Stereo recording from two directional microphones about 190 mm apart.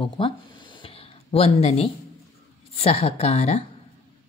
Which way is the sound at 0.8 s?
30° left (ahead or behind).